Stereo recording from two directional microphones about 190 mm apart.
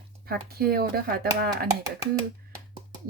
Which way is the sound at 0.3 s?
55° right (ahead or behind).